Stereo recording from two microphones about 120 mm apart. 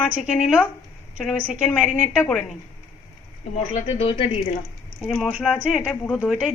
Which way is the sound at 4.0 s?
50° left (ahead or behind).